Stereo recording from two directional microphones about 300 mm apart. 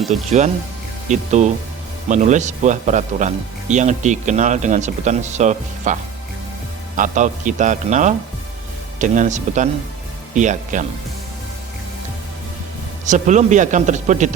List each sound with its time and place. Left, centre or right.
0.1 s speech: right
13.1 s speech: right